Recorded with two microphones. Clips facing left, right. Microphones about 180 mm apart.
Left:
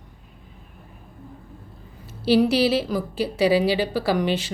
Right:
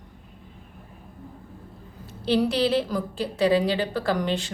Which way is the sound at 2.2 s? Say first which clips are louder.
Left 4 dB; 5° left (ahead or behind).